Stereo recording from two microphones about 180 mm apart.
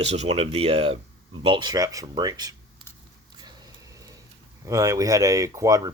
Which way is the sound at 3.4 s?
20° right (ahead or behind).